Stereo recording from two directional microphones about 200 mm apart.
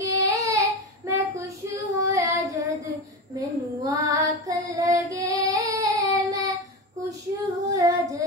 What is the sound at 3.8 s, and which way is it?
Child singing, 15° right (ahead or behind).